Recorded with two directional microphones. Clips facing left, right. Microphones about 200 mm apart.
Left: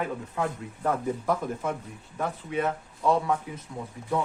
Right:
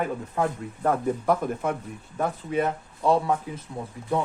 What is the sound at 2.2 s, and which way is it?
Speech, 35° right (ahead or behind).